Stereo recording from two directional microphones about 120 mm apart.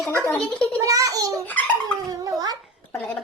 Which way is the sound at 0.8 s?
30° right (ahead or behind).